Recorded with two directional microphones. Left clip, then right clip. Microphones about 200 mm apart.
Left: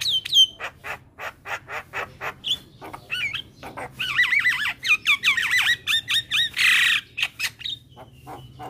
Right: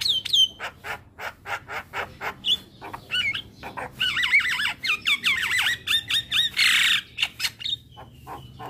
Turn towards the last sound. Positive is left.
turn(degrees=20)  # may be behind; listen again after turning